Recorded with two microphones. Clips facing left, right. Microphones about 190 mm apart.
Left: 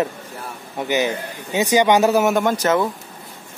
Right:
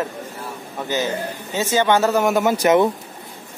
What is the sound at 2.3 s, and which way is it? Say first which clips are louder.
Speech: right 2 dB; 5° right (ahead or behind).